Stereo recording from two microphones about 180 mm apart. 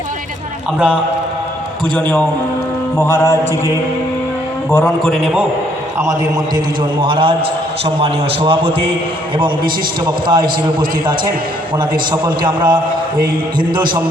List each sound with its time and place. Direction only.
2.0 s mantra: 5° left (ahead or behind)
4.7 s a man's voice: 5° left (ahead or behind)
7.0 s a man's voice: 30° right (ahead or behind)